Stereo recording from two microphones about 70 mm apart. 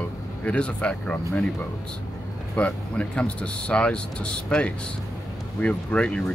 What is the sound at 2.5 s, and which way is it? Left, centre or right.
Speech, centre.